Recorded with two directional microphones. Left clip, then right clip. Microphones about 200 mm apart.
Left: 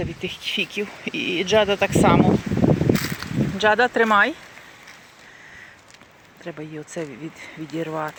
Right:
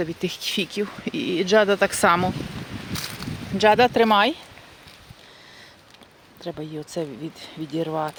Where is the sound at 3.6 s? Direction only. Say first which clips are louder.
Right 1 dB; 25° right (ahead or behind).